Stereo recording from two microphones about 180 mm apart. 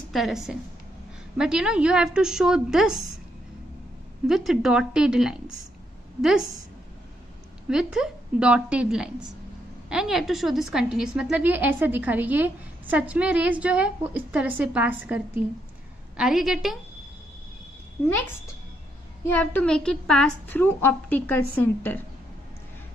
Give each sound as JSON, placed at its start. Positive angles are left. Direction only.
{"t": 0.1, "sound": "a woman's voice", "side_deg": 0}
{"t": 4.3, "sound": "a woman's voice", "side_deg": 0}
{"t": 7.6, "sound": "a woman's voice", "side_deg": -5}
{"t": 19.2, "sound": "a woman's voice", "side_deg": 10}